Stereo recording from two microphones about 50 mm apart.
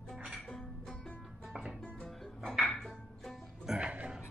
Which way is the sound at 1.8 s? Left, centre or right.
Centre.